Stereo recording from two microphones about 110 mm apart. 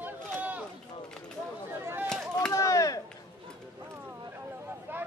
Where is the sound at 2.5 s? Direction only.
30° left (ahead or behind).